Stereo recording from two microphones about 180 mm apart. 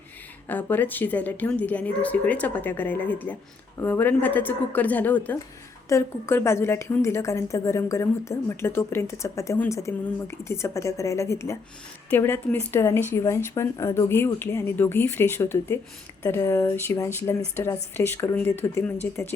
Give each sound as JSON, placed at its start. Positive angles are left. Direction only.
{"t": 0.4, "sound": "a woman's voice", "side_deg": 10}